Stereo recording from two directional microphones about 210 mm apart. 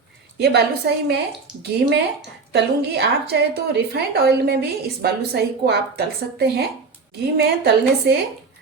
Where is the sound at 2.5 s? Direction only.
55° right (ahead or behind).